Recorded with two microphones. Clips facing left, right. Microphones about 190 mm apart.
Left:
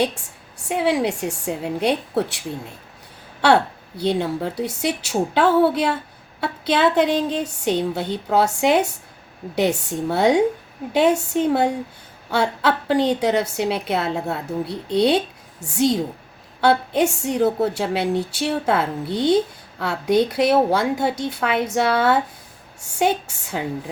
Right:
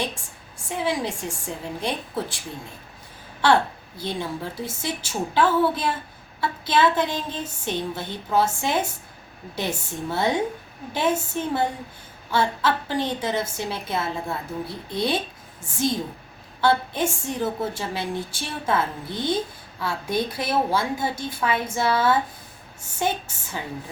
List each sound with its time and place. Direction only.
0.6 s a woman's voice: 70° left (ahead or behind)
3.4 s a woman's voice: 65° left (ahead or behind)
12.3 s a woman's voice: 70° left (ahead or behind)
23.2 s a woman's voice: 70° left (ahead or behind)